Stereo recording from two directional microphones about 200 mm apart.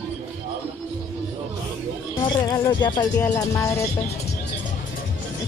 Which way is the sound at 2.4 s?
20° left (ahead or behind).